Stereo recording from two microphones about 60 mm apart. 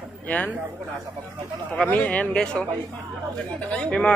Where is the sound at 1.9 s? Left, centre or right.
Left.